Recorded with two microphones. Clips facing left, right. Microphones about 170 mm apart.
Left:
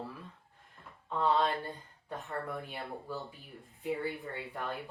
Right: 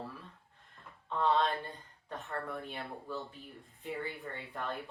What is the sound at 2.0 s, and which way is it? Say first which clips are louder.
A woman's voice: left 1 dB; 15° left (ahead or behind).